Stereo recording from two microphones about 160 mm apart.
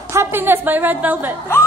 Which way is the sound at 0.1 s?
15° right (ahead or behind).